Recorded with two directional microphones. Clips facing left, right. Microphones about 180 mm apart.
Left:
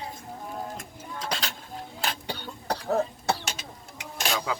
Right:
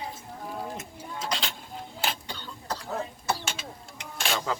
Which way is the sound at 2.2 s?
65° left (ahead or behind).